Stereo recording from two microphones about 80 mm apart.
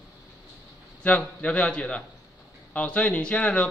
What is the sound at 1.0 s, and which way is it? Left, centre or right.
A man's voice, centre.